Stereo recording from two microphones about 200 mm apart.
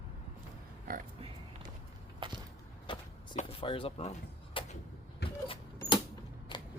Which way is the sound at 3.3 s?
25° left (ahead or behind).